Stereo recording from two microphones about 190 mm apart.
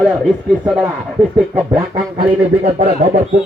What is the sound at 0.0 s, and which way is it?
Speech, 5° right (ahead or behind).